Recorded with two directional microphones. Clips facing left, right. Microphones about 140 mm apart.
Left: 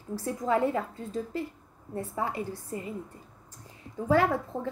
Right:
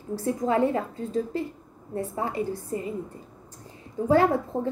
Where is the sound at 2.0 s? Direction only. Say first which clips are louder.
Right 4 dB; 25° right (ahead or behind).